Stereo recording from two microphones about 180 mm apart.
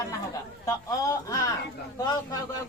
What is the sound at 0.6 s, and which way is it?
A man's voice, 15° left (ahead or behind).